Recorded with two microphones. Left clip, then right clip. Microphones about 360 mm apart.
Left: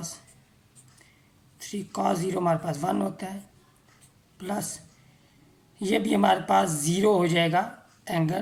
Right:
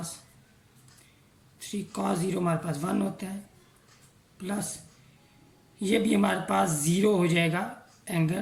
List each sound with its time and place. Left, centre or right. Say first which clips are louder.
1.5 s speech: left 4 dB; centre
4.4 s speech: left 3 dB; centre
5.8 s speech: left 3 dB; centre